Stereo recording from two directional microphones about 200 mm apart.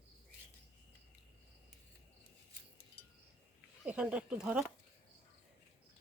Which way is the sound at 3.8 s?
5° right (ahead or behind).